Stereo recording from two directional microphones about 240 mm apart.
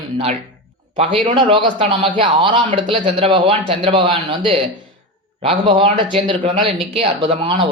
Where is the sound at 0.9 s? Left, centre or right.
Right.